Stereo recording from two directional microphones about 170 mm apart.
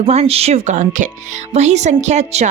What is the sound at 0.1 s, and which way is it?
Speech, 40° right (ahead or behind).